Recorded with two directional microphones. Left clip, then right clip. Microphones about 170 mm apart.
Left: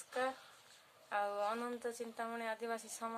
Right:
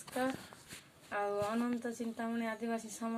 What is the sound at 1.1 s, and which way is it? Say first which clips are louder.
Speech: right 2 dB; 25° left (ahead or behind).